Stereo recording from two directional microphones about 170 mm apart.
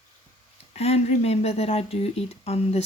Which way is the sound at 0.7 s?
40° left (ahead or behind).